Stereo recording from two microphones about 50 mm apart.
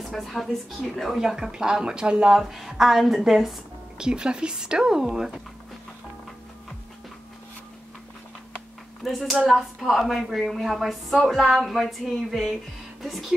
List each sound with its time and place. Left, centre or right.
0.1 s a woman's voice: centre
1.2 s speech: centre
2.3 s a woman's voice: centre
4.0 s speech: centre
9.0 s a woman's voice: centre